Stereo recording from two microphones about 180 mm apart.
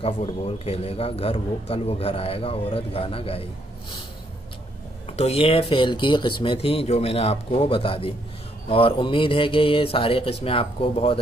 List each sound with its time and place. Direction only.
0.0 s a man's voice: 35° left (ahead or behind)
5.1 s a man's voice: 35° left (ahead or behind)